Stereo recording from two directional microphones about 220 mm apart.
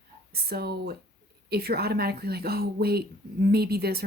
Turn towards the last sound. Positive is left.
turn(degrees=-45)  # may be behind; listen again after turning